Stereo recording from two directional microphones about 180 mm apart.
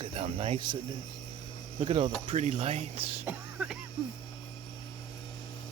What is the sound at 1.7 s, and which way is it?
Speech, 35° right (ahead or behind).